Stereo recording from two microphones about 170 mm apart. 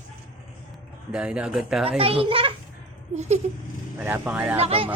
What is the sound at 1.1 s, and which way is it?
Speech, 5° right (ahead or behind).